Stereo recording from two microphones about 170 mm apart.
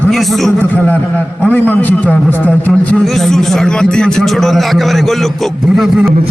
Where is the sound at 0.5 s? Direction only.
10° left (ahead or behind).